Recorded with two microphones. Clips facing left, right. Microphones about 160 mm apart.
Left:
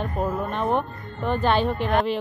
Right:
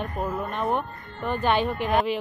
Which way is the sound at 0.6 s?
5° right (ahead or behind).